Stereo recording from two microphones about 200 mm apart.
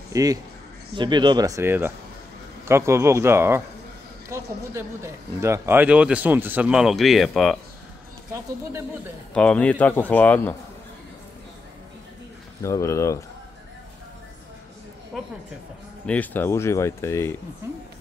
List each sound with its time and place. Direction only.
0.1 s speech: 15° right (ahead or behind); by 7.5 s centre (ahead or behind)
8.3 s speech: 15° right (ahead or behind)
9.3 s speech: 5° left (ahead or behind)
12.6 s speech: 15° left (ahead or behind)
15.1 s a sound: 5° right (ahead or behind)
16.1 s speech: 10° left (ahead or behind)